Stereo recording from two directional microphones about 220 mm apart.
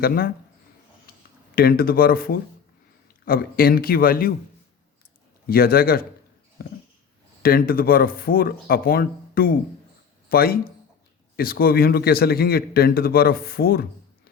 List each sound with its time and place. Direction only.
0.0 s a man's voice: 45° left (ahead or behind)
1.1 s a sound: 40° left (ahead or behind)
1.5 s a man's voice: 45° left (ahead or behind)
5.5 s a man's voice: 45° left (ahead or behind)
7.4 s a man's voice: 40° left (ahead or behind)